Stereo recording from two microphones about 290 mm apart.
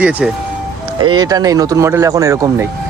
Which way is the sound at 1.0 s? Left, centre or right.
Centre.